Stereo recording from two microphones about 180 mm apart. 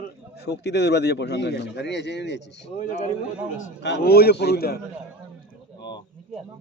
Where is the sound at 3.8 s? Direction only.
70° left (ahead or behind).